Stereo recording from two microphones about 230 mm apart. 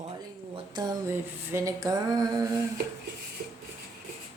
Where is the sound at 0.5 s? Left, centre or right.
Centre.